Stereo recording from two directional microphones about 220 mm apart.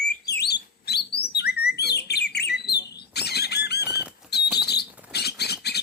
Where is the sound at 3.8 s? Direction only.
10° right (ahead or behind).